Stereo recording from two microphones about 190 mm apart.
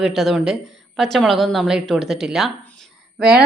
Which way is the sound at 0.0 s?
Centre (ahead or behind).